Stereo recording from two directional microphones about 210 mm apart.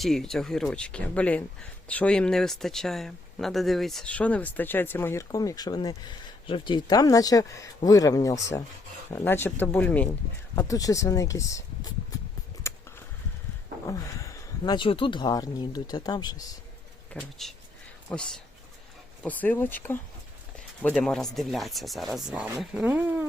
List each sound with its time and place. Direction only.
0.0 s speech: centre (ahead or behind)
12.7 s a sound: 10° left (ahead or behind)
13.8 s speech: 15° left (ahead or behind)
17.2 s speech: centre (ahead or behind)